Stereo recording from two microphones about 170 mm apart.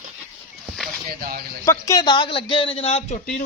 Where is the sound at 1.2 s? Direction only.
60° right (ahead or behind).